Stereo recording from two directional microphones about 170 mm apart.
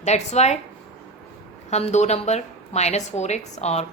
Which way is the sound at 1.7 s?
40° left (ahead or behind).